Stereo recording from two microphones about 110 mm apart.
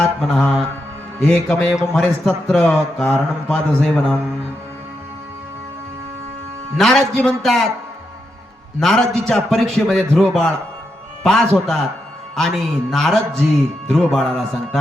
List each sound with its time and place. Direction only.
0.0 s a man's voice: centre (ahead or behind)
6.7 s a man's voice: 5° left (ahead or behind)
8.8 s a man's voice: 5° left (ahead or behind)